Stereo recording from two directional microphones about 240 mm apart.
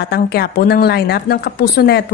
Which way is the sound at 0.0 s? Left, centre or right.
Left.